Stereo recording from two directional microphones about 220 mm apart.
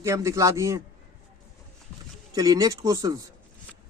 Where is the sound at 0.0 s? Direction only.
15° right (ahead or behind).